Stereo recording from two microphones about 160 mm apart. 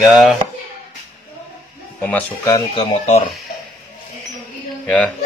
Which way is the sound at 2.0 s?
10° left (ahead or behind).